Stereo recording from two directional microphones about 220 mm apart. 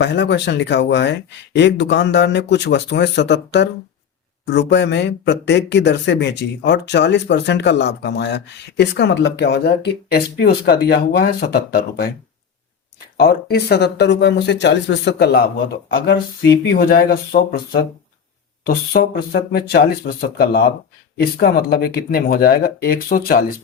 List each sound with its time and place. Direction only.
0.0 s speech: 50° left (ahead or behind)
13.1 s speech: 45° left (ahead or behind)